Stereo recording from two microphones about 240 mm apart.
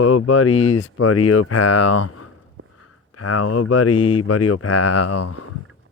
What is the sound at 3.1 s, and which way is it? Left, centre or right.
Speech, left.